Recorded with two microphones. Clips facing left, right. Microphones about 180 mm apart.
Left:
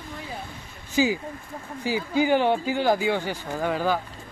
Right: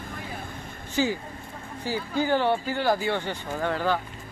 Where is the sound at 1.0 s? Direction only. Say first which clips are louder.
Left 3 dB; 10° left (ahead or behind).